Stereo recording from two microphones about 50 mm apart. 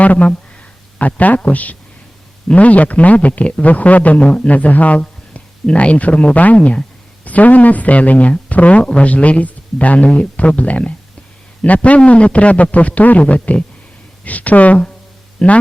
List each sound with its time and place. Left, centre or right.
0.0 s a man's voice: left
15.4 s speech: centre